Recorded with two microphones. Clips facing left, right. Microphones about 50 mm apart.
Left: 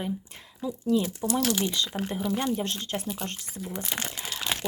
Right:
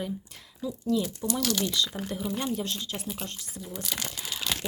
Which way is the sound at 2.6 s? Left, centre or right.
Left.